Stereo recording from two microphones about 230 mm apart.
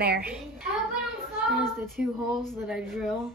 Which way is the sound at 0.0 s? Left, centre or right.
Right.